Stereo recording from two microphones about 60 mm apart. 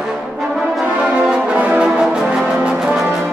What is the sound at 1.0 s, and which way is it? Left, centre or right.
Music, right.